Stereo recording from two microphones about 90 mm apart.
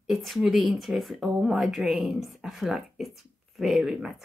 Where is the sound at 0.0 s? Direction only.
Centre (ahead or behind).